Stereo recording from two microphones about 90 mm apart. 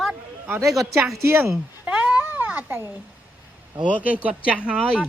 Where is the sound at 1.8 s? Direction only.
10° right (ahead or behind).